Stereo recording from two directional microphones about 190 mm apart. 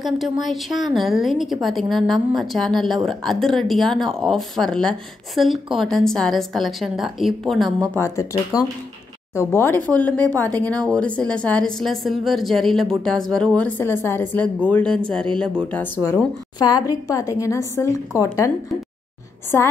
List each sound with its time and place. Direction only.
0.0 s speech: centre (ahead or behind)
7.9 s a woman's voice: 15° left (ahead or behind)
19.5 s a woman's voice: 10° left (ahead or behind)